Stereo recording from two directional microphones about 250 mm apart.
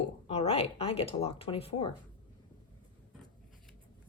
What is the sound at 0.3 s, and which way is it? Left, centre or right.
Speech, left.